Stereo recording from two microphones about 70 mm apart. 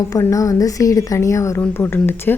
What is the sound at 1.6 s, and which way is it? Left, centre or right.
Speech, left.